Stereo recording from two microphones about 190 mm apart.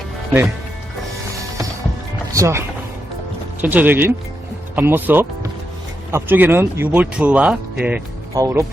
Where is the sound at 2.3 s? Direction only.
15° right (ahead or behind).